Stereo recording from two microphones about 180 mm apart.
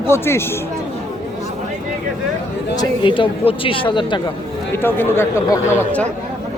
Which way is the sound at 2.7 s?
25° left (ahead or behind).